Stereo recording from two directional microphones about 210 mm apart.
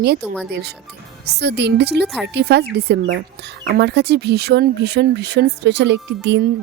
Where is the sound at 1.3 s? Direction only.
55° right (ahead or behind).